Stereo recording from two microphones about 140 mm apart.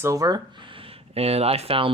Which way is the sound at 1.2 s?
45° right (ahead or behind).